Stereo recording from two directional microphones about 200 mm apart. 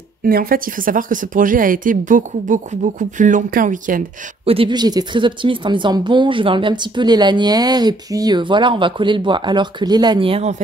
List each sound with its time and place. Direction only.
0.2 s a woman's voice: 45° right (ahead or behind)
4.5 s a woman's voice: 25° right (ahead or behind)